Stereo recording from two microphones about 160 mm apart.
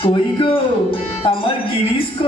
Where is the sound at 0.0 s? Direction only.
30° left (ahead or behind).